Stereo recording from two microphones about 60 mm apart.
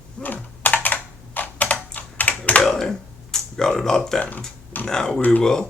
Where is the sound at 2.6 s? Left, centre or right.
Centre.